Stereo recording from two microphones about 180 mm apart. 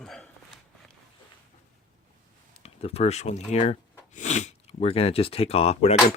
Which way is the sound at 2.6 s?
35° left (ahead or behind).